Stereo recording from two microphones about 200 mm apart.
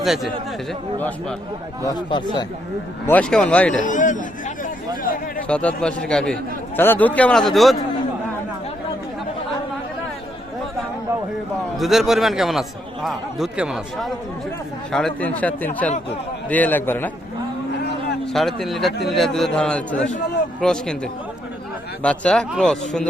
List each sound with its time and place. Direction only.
0.0 s a man's voice: centre (ahead or behind)
1.8 s speech: 20° left (ahead or behind)
3.1 s a man's voice: 5° left (ahead or behind)
3.8 s speech: 40° left (ahead or behind)
5.5 s a man's voice: 5° left (ahead or behind)
11.8 s a man's voice: centre (ahead or behind)
18.3 s a man's voice: centre (ahead or behind)